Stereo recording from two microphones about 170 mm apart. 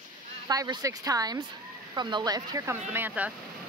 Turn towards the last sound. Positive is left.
turn(degrees=-10)  # may be behind; listen again after turning